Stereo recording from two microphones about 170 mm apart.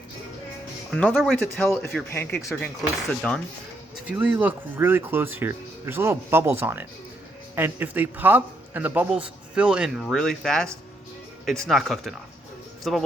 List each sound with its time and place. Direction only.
0.9 s speech: 5° left (ahead or behind)
4.0 s a man's voice: 10° right (ahead or behind)